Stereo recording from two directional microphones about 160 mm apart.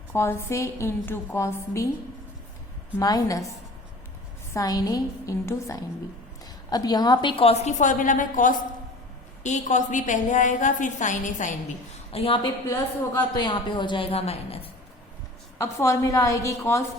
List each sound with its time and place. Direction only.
0.1 s a woman's voice: 15° left (ahead or behind)
3.0 s a woman's voice: 20° left (ahead or behind)
4.5 s a woman's voice: 20° left (ahead or behind); by 11.5 s 50° left (ahead or behind)
12.1 s a woman's voice: 35° left (ahead or behind)
15.5 s a woman's voice: 20° left (ahead or behind)